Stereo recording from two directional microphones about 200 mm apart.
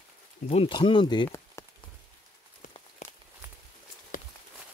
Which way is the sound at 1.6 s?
15° left (ahead or behind).